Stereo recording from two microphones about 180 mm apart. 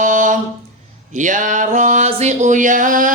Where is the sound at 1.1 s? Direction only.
45° right (ahead or behind).